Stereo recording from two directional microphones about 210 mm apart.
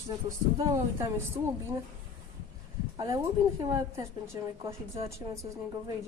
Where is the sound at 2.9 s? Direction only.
15° right (ahead or behind).